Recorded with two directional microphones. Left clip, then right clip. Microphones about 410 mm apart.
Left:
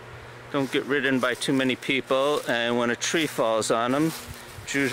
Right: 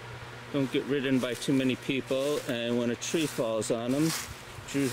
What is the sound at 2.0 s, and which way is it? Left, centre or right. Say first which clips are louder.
Speech: left 6 dB; centre.